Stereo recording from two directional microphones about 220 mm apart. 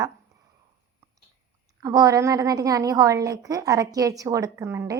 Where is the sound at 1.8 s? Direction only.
15° right (ahead or behind).